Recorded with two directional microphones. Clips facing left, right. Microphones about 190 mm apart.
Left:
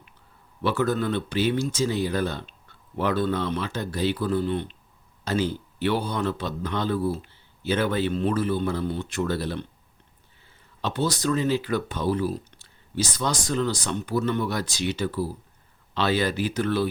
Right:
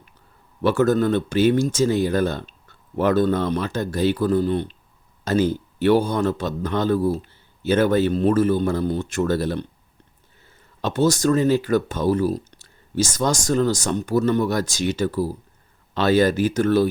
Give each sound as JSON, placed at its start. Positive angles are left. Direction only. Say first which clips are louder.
{"t": 0.6, "sound": "speech", "louder": "right 6 dB", "side_deg": -45}
{"t": 10.8, "sound": "speech", "louder": "right 7 dB", "side_deg": -45}